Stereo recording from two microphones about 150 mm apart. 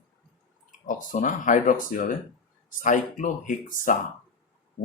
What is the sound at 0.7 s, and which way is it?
Speech, 60° left (ahead or behind).